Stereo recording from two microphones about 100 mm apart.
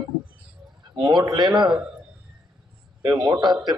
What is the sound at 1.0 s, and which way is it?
Speech, 45° right (ahead or behind).